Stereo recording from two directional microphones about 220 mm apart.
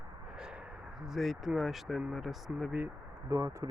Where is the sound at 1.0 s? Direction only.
Centre (ahead or behind).